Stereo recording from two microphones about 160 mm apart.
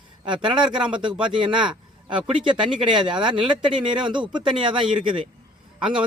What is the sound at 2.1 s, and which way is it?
Speech, 30° right (ahead or behind).